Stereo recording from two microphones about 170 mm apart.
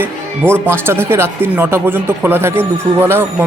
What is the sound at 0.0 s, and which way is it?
A man's voice, 15° right (ahead or behind).